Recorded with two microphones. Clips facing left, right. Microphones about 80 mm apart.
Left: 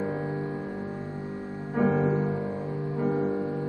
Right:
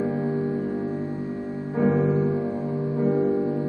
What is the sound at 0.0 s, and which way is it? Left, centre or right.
Music, centre.